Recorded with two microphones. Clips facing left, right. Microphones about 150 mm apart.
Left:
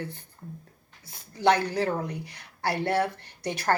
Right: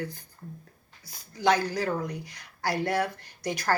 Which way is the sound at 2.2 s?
65° left (ahead or behind).